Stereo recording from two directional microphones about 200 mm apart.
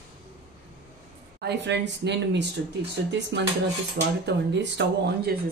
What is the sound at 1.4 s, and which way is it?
Speech, 60° right (ahead or behind).